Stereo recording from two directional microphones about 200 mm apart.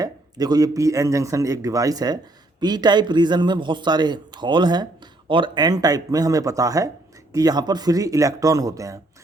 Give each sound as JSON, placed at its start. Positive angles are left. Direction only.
{"t": 0.0, "sound": "a man's voice", "side_deg": -20}